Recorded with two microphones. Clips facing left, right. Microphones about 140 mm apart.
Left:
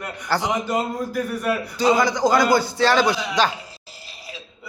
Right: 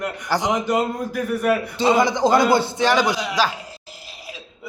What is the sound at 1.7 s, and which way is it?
A man's voice, 25° right (ahead or behind).